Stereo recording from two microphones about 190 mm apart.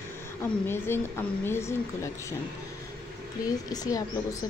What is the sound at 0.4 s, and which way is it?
A woman's voice, 10° left (ahead or behind).